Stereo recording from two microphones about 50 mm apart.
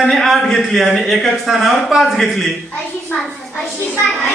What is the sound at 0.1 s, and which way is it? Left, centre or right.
A child's voice, centre.